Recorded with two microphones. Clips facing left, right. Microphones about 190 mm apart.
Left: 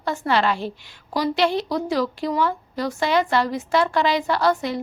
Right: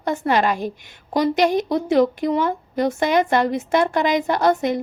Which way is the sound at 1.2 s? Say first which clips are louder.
Right 3 dB; 45° right (ahead or behind).